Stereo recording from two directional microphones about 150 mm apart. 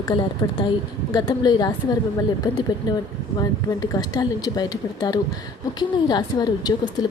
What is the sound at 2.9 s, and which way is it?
Speech, 30° left (ahead or behind).